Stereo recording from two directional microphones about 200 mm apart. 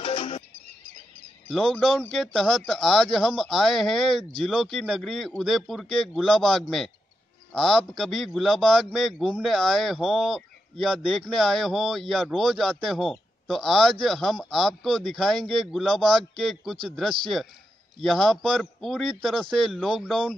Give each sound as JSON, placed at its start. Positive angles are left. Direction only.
{"t": 0.0, "sound": "music", "side_deg": 35}
{"t": 1.5, "sound": "a man's voice", "side_deg": 5}